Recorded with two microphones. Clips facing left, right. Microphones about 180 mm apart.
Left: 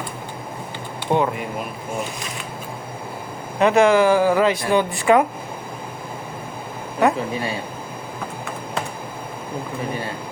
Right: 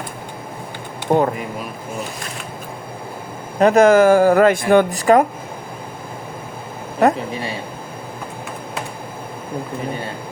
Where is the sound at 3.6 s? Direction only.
40° right (ahead or behind).